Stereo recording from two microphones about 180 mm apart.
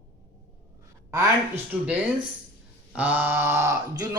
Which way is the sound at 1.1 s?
15° right (ahead or behind).